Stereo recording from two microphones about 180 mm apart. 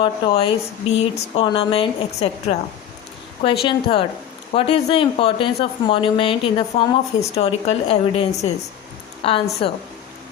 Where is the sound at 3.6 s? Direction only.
30° left (ahead or behind).